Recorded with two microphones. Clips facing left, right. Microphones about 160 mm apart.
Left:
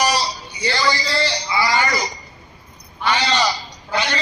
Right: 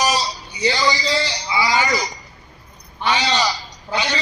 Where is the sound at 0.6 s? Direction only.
20° right (ahead or behind).